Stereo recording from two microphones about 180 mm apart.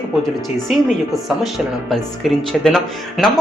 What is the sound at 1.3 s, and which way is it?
Speech, centre (ahead or behind).